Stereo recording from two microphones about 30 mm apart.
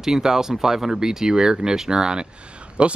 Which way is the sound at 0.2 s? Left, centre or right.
Centre.